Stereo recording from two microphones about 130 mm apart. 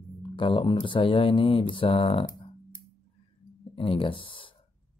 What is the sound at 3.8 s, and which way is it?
Speech, 45° left (ahead or behind).